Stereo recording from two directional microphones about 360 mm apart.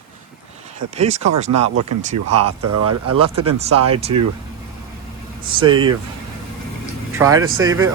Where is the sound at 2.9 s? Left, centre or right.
Right.